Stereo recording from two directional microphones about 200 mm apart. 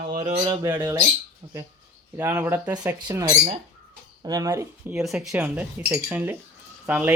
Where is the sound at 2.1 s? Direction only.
10° right (ahead or behind).